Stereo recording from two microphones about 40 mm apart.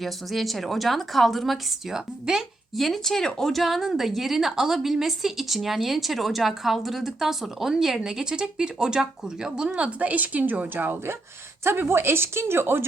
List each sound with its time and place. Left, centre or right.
0.0 s a woman's voice: centre
1.9 s a woman's voice: centre
2.7 s speech: centre
3.6 s a woman's voice: centre
9.6 s speech: right
11.6 s speech: right